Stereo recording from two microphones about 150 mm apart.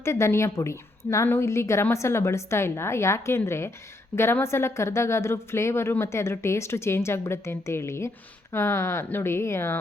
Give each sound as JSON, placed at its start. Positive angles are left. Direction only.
{"t": 0.0, "sound": "a woman's voice", "side_deg": 20}